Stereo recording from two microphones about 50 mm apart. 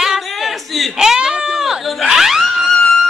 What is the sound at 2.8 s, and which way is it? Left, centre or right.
Music, centre.